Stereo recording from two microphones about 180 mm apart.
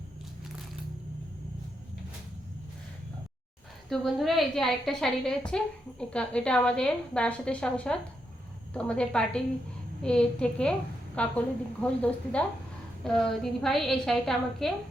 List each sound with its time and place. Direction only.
3.8 s a woman's voice: centre (ahead or behind)